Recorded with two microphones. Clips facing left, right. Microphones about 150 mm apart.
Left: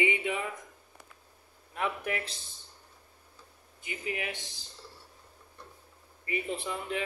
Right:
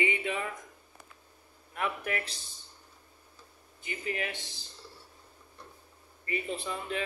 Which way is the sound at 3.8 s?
15° left (ahead or behind).